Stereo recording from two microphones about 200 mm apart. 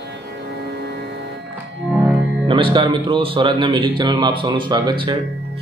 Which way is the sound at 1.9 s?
10° right (ahead or behind).